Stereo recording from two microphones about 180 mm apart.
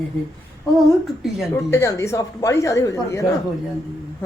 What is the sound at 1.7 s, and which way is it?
A woman's voice, 15° left (ahead or behind).